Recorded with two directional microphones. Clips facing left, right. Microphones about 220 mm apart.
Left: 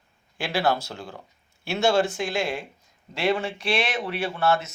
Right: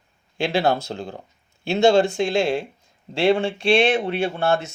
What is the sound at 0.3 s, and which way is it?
Speech, 25° right (ahead or behind).